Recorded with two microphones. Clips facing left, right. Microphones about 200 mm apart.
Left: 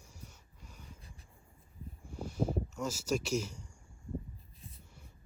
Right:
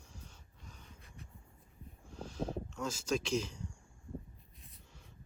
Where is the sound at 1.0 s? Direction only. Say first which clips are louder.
Right 3 dB; 35° left (ahead or behind).